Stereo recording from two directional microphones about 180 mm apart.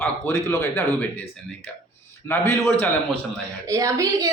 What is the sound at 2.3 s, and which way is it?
Speech, 15° left (ahead or behind).